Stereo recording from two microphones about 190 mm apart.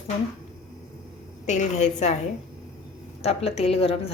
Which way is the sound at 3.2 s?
35° left (ahead or behind).